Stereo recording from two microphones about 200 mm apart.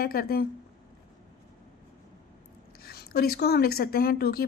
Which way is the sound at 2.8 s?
50° left (ahead or behind).